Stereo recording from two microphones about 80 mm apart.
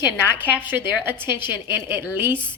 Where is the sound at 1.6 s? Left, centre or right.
Right.